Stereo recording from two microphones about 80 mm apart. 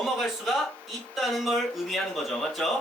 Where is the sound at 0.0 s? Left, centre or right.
Centre.